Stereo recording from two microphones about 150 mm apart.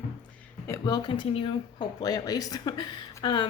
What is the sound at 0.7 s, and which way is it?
Speech, 25° left (ahead or behind).